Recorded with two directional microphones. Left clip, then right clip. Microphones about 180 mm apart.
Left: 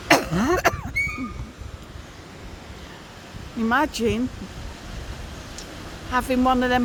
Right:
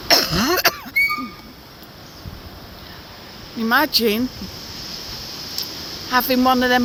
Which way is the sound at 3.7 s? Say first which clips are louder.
Right 5 dB; 5° left (ahead or behind).